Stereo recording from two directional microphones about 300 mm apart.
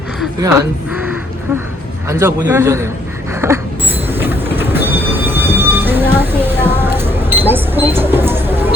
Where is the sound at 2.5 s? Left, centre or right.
Centre.